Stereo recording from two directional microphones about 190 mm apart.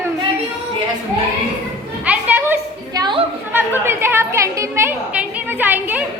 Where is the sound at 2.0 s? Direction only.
10° right (ahead or behind).